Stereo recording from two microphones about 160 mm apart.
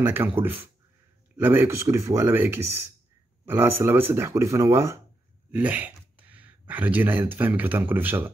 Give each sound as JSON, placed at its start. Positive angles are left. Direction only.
{"t": 0.0, "sound": "speech", "side_deg": -15}